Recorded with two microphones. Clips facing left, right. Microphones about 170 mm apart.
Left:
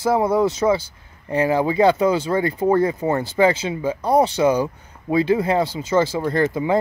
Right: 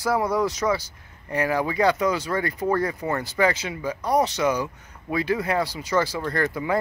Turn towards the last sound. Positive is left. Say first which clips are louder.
# left 5 dB
turn(degrees=25)  # may be behind; listen again after turning